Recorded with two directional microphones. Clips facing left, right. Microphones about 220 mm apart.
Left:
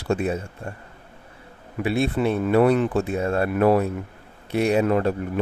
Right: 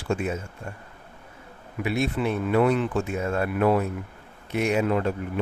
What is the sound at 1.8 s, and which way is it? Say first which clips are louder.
Speech: left 4 dB; 30° left (ahead or behind).